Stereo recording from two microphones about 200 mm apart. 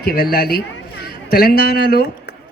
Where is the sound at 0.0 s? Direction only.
50° left (ahead or behind).